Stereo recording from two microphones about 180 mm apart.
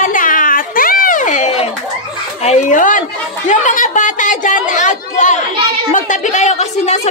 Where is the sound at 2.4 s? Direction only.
40° left (ahead or behind).